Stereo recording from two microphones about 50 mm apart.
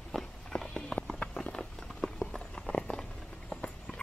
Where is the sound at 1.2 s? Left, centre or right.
Centre.